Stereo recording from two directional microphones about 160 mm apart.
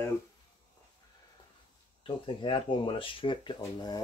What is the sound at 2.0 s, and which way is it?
Speech, 30° left (ahead or behind).